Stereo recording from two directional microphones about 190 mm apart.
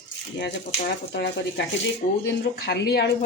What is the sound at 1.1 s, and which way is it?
Speech, 60° left (ahead or behind).